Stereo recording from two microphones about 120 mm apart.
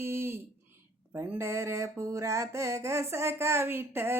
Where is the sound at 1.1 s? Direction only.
20° right (ahead or behind).